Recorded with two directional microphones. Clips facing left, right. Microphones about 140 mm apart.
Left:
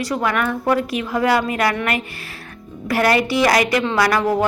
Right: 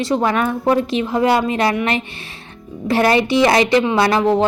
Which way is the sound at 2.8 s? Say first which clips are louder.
Right 2 dB; 25° right (ahead or behind).